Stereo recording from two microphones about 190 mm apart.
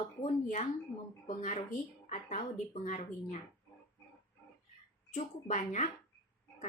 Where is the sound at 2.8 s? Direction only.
40° left (ahead or behind).